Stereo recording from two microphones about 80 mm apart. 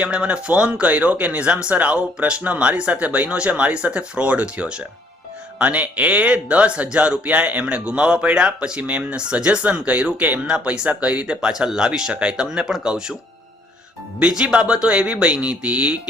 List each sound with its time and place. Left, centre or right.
0.0 s speech: centre
14.2 s speech: centre